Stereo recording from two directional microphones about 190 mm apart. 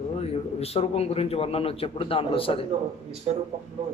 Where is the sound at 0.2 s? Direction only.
30° left (ahead or behind).